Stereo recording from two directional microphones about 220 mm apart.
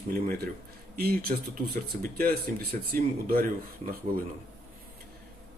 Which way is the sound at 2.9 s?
40° right (ahead or behind).